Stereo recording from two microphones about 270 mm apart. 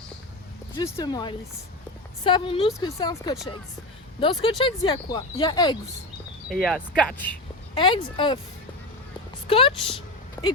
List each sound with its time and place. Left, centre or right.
0.9 s speech: centre
6.5 s speech: centre
7.8 s speech: centre
9.5 s speech: centre